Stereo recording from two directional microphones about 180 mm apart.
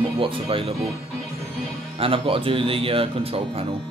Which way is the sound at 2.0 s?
30° right (ahead or behind).